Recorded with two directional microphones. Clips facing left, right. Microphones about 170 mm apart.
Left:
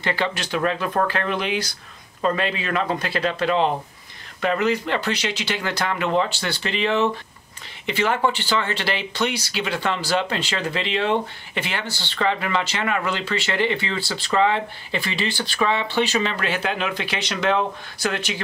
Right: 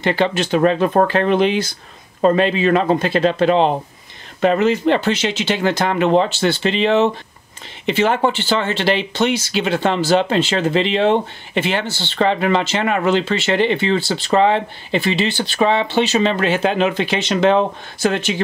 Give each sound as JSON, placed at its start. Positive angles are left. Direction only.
{"t": 0.0, "sound": "speech", "side_deg": -25}